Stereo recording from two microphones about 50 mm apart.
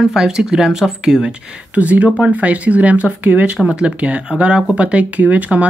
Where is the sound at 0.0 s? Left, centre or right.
Centre.